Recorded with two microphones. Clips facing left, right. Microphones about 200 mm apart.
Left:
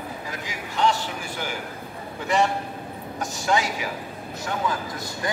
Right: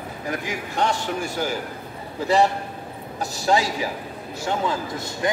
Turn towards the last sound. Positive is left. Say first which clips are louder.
# right 4 dB
turn(degrees=-25)  # may be behind; listen again after turning